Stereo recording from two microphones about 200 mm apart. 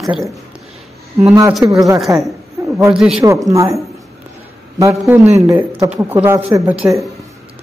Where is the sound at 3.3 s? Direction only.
15° right (ahead or behind).